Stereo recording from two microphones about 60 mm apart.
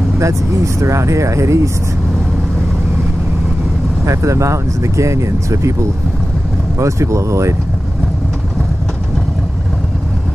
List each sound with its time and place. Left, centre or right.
0.2 s speech: right
4.0 s speech: right